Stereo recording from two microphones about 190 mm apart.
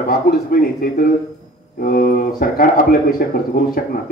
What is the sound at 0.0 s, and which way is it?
Speech, 50° left (ahead or behind).